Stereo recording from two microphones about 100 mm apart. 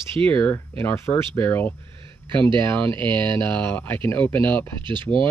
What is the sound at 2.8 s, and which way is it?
Speech, 55° right (ahead or behind).